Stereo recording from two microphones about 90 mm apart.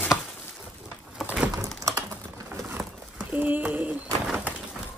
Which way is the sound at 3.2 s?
20° right (ahead or behind).